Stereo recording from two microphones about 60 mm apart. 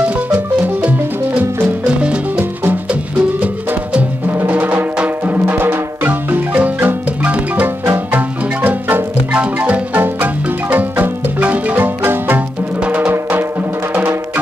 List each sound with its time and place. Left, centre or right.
0.0 s music: right
6.0 s marimba: right
7.3 s music: right
13.1 s music: right